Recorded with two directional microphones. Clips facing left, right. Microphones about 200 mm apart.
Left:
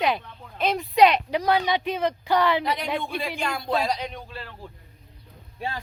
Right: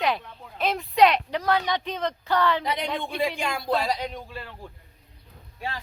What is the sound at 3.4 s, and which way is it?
Speech, 10° right (ahead or behind).